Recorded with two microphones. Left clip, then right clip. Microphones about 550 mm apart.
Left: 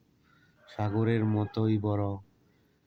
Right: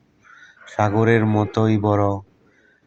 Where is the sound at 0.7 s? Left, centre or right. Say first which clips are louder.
Right 13 dB; left.